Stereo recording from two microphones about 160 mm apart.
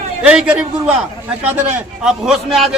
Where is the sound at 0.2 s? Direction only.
5° right (ahead or behind).